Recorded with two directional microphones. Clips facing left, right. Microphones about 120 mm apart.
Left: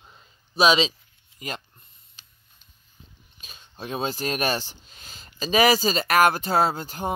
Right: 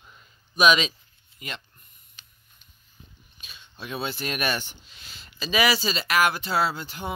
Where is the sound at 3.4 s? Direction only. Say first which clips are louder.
Left 3 dB; 40° left (ahead or behind).